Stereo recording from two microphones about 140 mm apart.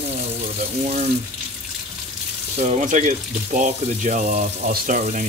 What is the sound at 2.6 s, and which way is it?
Speech, 55° right (ahead or behind).